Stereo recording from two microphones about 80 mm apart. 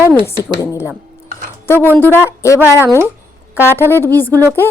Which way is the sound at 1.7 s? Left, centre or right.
Left.